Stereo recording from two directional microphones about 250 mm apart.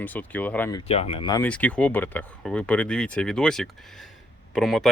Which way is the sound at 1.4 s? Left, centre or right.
Centre.